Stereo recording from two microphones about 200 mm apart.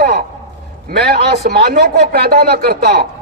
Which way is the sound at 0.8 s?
55° right (ahead or behind).